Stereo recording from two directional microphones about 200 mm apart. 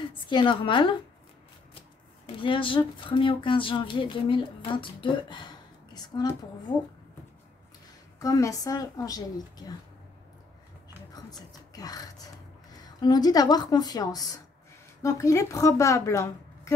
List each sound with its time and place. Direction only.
0.1 s speech: 25° left (ahead or behind)
2.3 s speech: 25° left (ahead or behind)
8.2 s a woman's voice: 15° left (ahead or behind)
11.1 s whispering: 20° left (ahead or behind)
12.8 s a woman's voice: 20° left (ahead or behind)